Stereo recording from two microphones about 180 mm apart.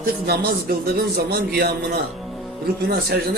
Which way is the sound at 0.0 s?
60° right (ahead or behind).